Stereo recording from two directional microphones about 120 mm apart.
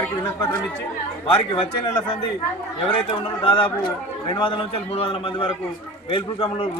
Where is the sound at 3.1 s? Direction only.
45° left (ahead or behind).